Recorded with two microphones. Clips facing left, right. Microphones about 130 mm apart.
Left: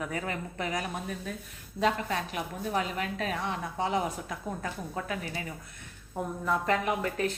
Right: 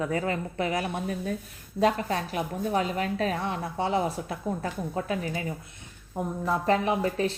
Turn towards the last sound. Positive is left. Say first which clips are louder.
# right 4 dB
turn(degrees=-30)  # may be behind; listen again after turning